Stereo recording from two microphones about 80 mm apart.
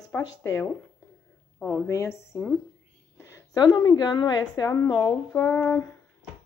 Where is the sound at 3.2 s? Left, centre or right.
Left.